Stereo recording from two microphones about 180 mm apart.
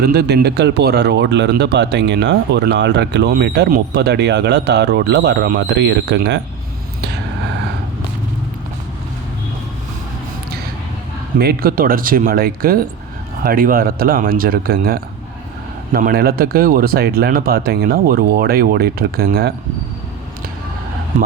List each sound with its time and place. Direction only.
0.0 s speech: 65° right (ahead or behind)
11.3 s speech: 60° right (ahead or behind)